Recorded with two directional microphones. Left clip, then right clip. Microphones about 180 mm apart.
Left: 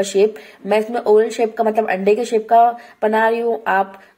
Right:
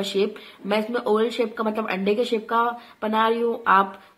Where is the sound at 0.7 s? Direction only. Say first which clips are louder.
Left 7 dB; 20° left (ahead or behind).